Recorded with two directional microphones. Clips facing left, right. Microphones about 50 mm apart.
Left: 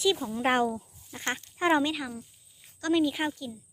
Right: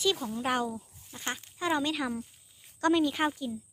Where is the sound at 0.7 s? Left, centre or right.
Left.